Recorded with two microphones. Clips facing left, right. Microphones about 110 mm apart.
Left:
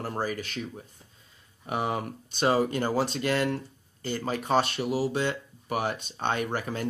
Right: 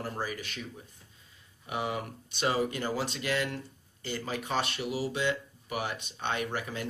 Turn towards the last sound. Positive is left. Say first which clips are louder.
# left 4 dB
turn(degrees=40)  # may be behind; listen again after turning